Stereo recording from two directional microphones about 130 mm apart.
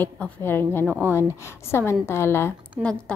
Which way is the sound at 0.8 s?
15° right (ahead or behind).